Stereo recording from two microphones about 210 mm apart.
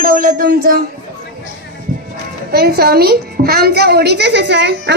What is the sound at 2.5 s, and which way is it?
A woman's voice, 50° right (ahead or behind).